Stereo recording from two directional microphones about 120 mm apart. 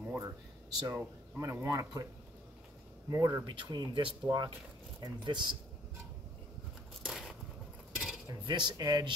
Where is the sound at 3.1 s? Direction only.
30° right (ahead or behind).